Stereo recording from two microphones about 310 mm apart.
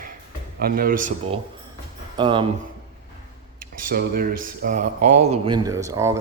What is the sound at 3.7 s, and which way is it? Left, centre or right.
Speech, right.